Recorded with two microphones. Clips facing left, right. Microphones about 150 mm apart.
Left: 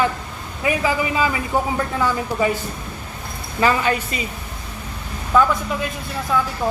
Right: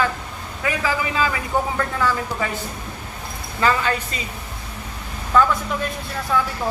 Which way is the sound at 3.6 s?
15° left (ahead or behind).